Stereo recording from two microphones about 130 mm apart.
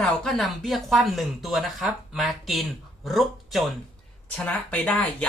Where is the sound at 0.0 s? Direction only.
5° left (ahead or behind).